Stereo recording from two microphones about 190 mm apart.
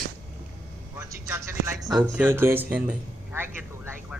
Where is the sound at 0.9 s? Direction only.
15° right (ahead or behind).